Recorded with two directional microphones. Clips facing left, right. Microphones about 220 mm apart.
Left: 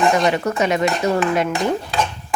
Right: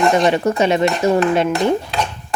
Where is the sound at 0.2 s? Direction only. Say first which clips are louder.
Right 3 dB; 30° right (ahead or behind).